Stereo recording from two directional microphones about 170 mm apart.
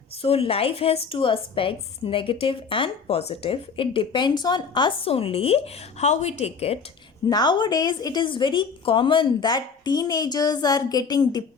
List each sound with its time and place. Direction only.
0.2 s a woman's voice: 35° left (ahead or behind)
7.3 s a woman's voice: 25° left (ahead or behind)